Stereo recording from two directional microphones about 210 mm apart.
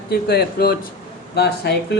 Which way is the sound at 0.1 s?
45° left (ahead or behind).